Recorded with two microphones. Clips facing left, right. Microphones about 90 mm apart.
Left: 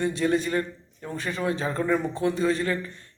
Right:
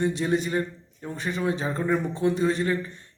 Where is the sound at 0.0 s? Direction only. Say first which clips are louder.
Even; 20° right (ahead or behind).